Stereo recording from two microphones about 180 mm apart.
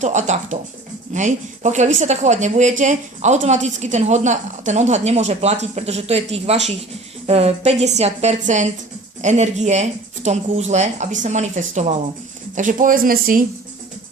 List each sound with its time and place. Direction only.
0.0 s a woman's voice: 40° right (ahead or behind)